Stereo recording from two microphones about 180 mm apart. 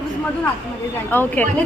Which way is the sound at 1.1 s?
10° left (ahead or behind).